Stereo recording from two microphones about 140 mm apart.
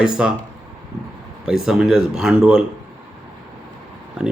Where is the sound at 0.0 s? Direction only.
5° right (ahead or behind).